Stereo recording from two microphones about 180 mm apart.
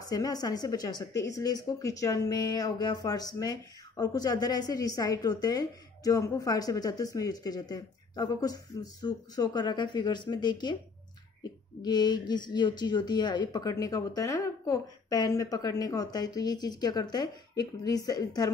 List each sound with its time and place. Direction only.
0.0 s a woman's voice: 20° left (ahead or behind)
11.8 s a woman's voice: 25° left (ahead or behind)